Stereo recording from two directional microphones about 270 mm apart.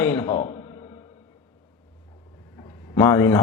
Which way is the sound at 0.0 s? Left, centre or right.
Centre.